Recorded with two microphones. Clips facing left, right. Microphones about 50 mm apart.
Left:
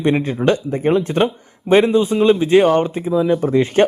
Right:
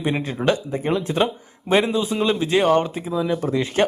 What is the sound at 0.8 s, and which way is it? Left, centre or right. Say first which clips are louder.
Speech: left 6 dB; left.